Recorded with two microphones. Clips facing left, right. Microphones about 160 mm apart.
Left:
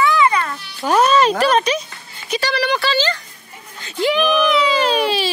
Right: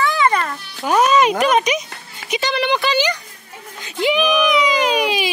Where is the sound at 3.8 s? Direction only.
15° right (ahead or behind).